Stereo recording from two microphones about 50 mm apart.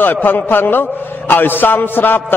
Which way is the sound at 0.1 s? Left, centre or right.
Left.